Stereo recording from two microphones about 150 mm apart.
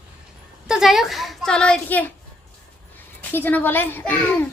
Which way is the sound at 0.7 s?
Centre (ahead or behind).